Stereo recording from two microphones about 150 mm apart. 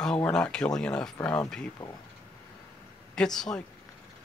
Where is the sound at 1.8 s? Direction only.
35° left (ahead or behind).